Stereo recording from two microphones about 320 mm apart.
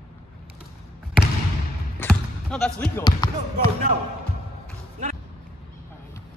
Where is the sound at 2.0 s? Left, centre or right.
Centre.